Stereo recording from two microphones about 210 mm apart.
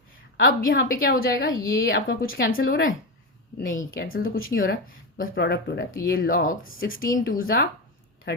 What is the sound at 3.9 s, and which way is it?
Speech, 45° left (ahead or behind).